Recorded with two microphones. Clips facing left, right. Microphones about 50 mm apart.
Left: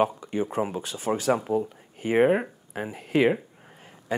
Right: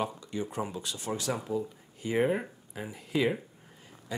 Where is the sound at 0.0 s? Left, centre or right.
Left.